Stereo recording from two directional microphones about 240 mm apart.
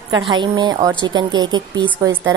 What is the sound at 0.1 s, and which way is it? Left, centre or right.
A woman's voice, centre.